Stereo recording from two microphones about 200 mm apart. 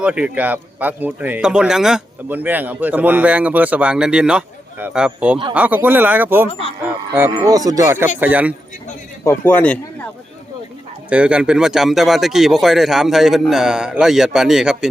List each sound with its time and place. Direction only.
0.0 s speech: 5° right (ahead or behind)
6.5 s speech: 30° left (ahead or behind)
6.8 s speech: 10° right (ahead or behind)
9.2 s a man's voice: 10° left (ahead or behind)
11.1 s speech: 5° right (ahead or behind)